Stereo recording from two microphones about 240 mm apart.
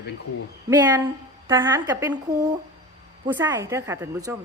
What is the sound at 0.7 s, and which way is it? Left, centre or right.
A woman's voice, centre.